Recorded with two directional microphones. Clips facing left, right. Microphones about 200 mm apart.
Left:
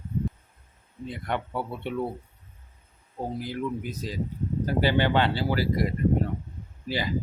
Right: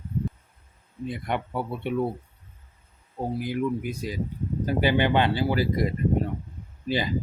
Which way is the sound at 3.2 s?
15° right (ahead or behind).